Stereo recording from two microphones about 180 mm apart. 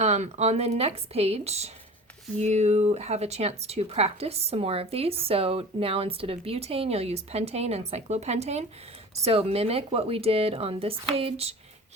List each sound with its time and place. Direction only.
0.0 s speech: 35° right (ahead or behind)